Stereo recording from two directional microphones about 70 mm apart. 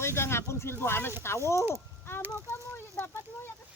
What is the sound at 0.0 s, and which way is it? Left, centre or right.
Speech, left.